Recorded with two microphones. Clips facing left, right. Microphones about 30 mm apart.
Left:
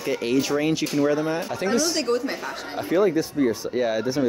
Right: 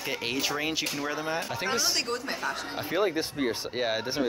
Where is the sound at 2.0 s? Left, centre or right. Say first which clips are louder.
Left 6 dB; centre.